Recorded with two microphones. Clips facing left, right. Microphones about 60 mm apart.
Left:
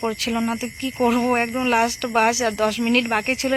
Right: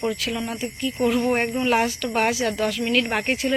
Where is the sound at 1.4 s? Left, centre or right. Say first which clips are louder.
Left 1 dB; centre.